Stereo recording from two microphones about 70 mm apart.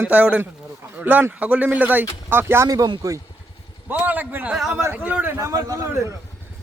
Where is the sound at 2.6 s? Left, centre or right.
Right.